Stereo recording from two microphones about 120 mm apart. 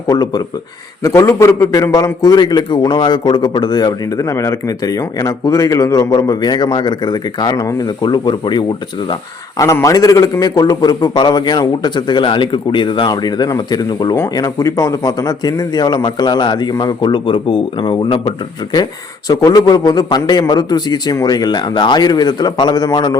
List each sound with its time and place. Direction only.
0.1 s a man's voice: 35° left (ahead or behind)
9.6 s a man's voice: 25° left (ahead or behind)